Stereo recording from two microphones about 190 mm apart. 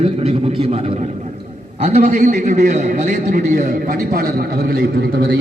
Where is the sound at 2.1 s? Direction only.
40° right (ahead or behind).